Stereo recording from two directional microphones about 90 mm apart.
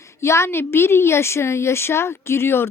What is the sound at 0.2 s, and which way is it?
A woman's voice, 30° left (ahead or behind).